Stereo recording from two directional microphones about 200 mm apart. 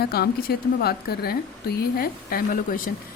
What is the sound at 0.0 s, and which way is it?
A woman's voice, 50° left (ahead or behind).